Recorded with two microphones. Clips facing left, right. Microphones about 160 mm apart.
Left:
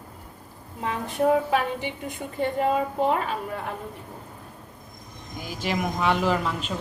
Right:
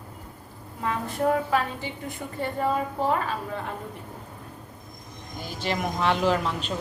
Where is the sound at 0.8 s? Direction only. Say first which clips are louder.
Left 2 dB; 20° left (ahead or behind).